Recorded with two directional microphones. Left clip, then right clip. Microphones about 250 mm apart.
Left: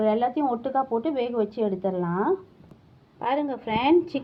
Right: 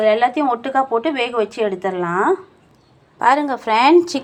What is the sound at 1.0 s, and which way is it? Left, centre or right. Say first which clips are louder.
Speech: right 7 dB; centre.